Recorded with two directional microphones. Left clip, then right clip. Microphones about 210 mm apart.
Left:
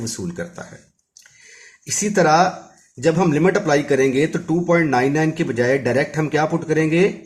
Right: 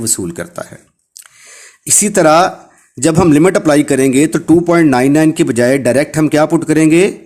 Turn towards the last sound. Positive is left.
turn(degrees=-55)  # may be behind; listen again after turning